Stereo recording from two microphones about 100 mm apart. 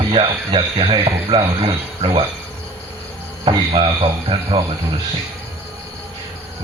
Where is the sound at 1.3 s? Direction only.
80° right.